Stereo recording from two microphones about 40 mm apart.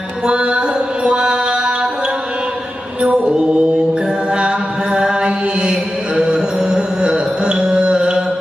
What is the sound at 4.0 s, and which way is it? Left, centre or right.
Mantra, right.